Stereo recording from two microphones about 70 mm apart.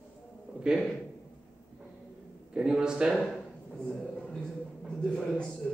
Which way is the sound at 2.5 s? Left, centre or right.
Centre.